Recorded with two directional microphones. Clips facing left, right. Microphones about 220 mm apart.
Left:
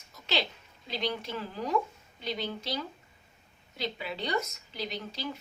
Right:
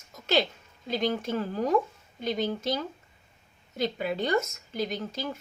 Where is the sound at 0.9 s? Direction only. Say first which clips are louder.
Right 6 dB; 45° right (ahead or behind).